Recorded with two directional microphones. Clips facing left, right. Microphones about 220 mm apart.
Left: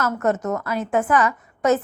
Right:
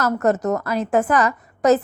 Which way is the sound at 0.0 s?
35° right (ahead or behind).